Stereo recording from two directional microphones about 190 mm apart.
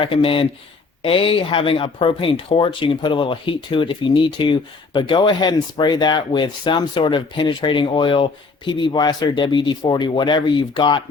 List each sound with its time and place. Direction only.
0.0 s speech: 30° left (ahead or behind)